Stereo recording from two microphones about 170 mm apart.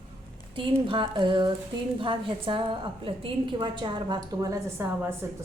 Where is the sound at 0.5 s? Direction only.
30° right (ahead or behind).